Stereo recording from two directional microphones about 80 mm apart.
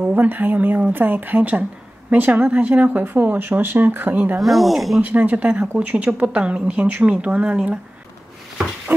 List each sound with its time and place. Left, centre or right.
0.0 s speech: centre
4.4 s speech: centre
5.0 s a woman's voice: right